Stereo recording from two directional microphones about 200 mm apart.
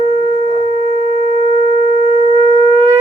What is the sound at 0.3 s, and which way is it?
Shofar, 35° right (ahead or behind).